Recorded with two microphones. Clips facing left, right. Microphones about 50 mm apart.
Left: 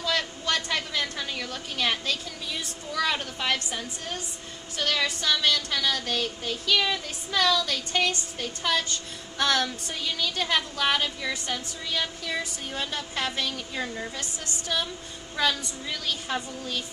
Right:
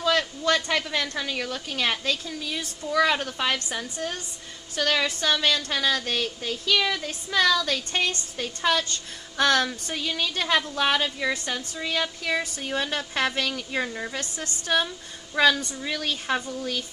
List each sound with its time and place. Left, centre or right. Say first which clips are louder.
0.0 s a sound: right 5 dB; right
2.6 s a woman's voice: right 7 dB; right
4.8 s a woman's voice: right 3 dB; right
7.3 s a woman's voice: right 2 dB; right
12.3 s a woman's voice: right 5 dB; right
14.2 s a woman's voice: right 2 dB; right